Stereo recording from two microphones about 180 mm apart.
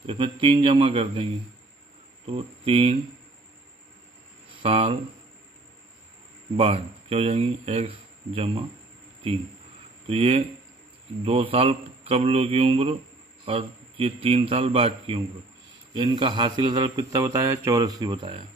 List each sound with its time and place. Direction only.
0.0 s a man's voice: 30° right (ahead or behind)
2.2 s speech: 30° right (ahead or behind)
4.6 s a man's voice: 30° right (ahead or behind)
6.5 s speech: 30° right (ahead or behind)
10.0 s a man's voice: 30° right (ahead or behind)